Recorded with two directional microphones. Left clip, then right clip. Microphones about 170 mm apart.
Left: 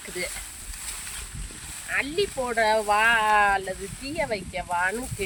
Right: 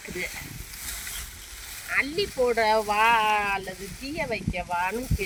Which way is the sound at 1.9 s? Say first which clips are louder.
Even; 25° left (ahead or behind).